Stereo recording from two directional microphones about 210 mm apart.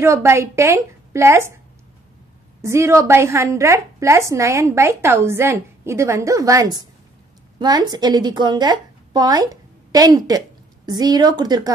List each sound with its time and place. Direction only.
0.0 s a woman's voice: 10° right (ahead or behind)
2.6 s a woman's voice: 15° right (ahead or behind)